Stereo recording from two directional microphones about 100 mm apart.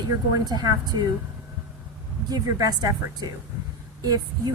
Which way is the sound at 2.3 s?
40° right (ahead or behind).